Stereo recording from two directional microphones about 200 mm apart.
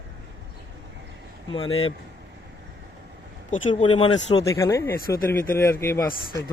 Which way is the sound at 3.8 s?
25° left (ahead or behind).